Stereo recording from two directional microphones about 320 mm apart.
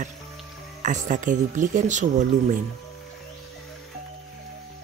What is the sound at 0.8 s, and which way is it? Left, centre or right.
Speech, right.